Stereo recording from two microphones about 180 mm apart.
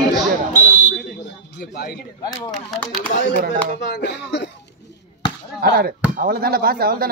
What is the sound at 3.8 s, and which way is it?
Speech, 75° left (ahead or behind).